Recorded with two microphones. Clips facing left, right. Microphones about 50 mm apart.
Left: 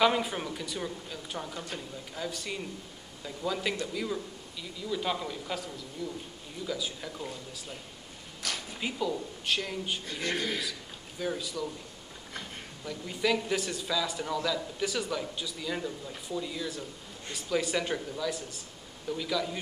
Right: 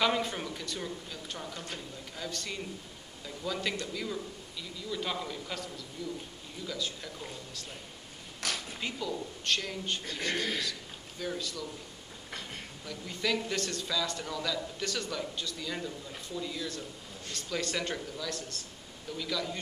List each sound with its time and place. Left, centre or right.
0.0 s a man's voice: centre
8.7 s a man's voice: centre
10.2 s speech: left
10.6 s a man's voice: centre
12.8 s a man's voice: centre